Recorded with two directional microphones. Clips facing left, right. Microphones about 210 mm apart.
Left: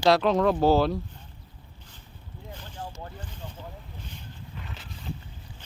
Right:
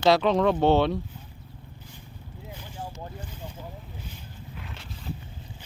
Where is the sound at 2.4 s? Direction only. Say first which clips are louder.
Even; 10° right (ahead or behind).